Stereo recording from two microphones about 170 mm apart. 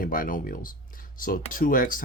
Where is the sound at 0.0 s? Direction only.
55° left (ahead or behind).